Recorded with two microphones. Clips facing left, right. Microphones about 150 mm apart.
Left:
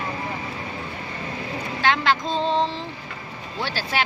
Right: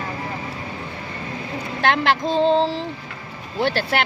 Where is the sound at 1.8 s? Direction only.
60° right (ahead or behind).